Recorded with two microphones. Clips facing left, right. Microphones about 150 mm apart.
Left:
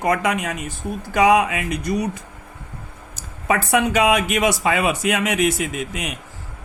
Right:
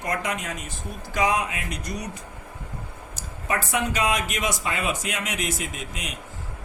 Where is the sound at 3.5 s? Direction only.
65° left (ahead or behind).